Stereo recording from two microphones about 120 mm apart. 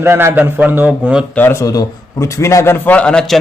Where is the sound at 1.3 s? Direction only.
15° left (ahead or behind).